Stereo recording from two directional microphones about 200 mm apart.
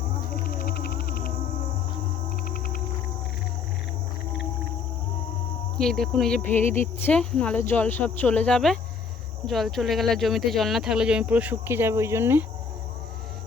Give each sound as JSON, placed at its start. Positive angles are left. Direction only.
{"t": 0.4, "sound": "music", "side_deg": 50}
{"t": 2.5, "sound": "whale vocalization", "side_deg": 45}
{"t": 5.7, "sound": "speech", "side_deg": 0}